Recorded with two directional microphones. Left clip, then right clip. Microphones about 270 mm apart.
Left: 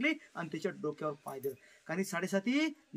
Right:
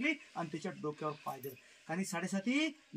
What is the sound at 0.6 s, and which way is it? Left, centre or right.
Speech, centre.